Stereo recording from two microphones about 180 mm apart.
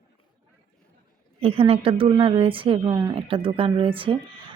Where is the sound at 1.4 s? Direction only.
30° right (ahead or behind).